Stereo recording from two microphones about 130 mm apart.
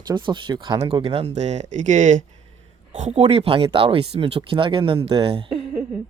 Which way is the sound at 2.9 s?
60° right (ahead or behind).